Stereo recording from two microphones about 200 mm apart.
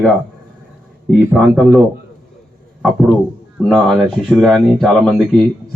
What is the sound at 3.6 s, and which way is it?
Speech, centre (ahead or behind).